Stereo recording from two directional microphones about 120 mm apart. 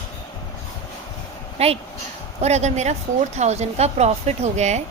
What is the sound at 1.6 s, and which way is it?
A woman's voice, 60° right (ahead or behind).